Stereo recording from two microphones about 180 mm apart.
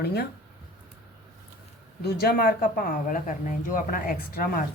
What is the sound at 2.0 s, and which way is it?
Speech, 60° left (ahead or behind).